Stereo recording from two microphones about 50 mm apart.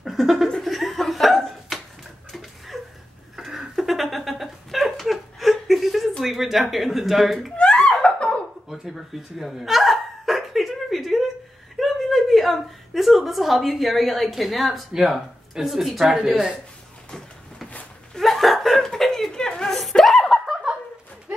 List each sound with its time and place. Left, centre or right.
0.0 s laughter: centre
2.3 s a sound: centre
6.2 s speech: centre
7.5 s laughter: left
8.6 s hiccup: centre
11.8 s a woman's voice: centre
18.1 s laughter: centre